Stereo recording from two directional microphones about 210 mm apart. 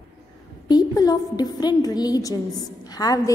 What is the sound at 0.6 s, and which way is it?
A woman's voice, 20° left (ahead or behind).